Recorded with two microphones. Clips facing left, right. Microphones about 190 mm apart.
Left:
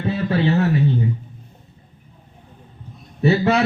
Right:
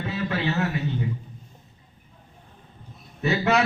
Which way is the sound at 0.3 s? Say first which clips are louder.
Left 8 dB; 30° left (ahead or behind).